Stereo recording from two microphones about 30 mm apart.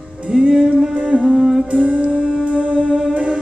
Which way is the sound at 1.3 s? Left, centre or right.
Centre.